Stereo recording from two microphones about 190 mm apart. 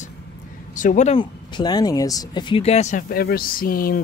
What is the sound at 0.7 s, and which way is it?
Speech, 40° left (ahead or behind).